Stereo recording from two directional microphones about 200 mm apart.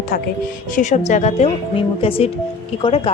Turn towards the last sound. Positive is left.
turn(degrees=25)  # may be behind; listen again after turning